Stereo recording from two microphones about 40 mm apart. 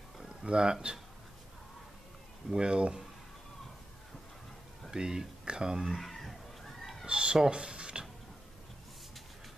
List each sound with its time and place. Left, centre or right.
0.5 s speech: right
2.5 s speech: right
4.9 s speech: centre
5.9 s children playing: centre
7.1 s cat: right
7.4 s mechanisms: right